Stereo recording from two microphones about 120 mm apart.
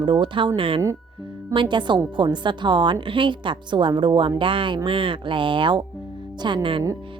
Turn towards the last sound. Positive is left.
turn(degrees=-45)  # may be behind; listen again after turning